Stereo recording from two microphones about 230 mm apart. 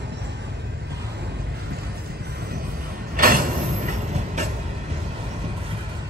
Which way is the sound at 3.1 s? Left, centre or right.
Right.